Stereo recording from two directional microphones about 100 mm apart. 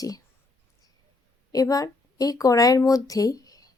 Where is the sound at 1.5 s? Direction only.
35° left (ahead or behind).